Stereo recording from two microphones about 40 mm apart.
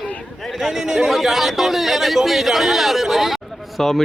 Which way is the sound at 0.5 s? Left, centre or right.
Centre.